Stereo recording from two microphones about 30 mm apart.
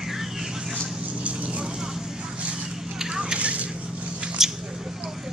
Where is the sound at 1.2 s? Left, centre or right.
Right.